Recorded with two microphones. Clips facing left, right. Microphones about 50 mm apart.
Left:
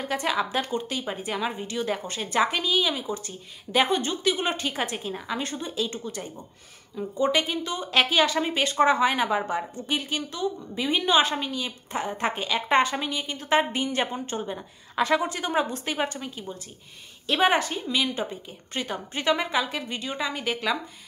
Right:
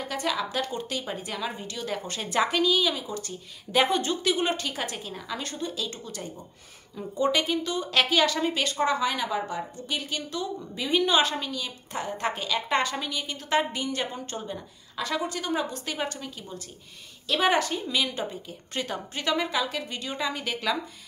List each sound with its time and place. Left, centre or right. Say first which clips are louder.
0.0 s speech: left 3 dB; left
0.7 s a woman's voice: left 3 dB; centre
4.6 s a woman's voice: left 3 dB; left